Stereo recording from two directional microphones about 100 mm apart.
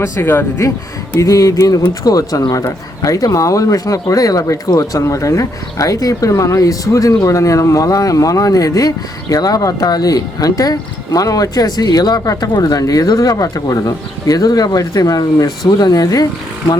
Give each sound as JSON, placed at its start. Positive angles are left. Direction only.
{"t": 0.0, "sound": "speech", "side_deg": 20}
{"t": 1.1, "sound": "speech", "side_deg": 35}